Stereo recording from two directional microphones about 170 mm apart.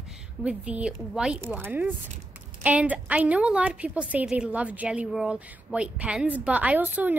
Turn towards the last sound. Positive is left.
turn(degrees=-10)  # may be behind; listen again after turning